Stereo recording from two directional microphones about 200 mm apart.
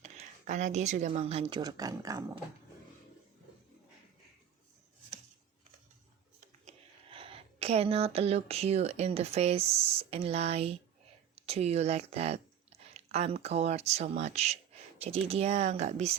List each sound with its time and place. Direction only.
0.0 s speech: 35° right (ahead or behind); by 2.4 s 15° right (ahead or behind)
6.7 s speech: 25° right (ahead or behind)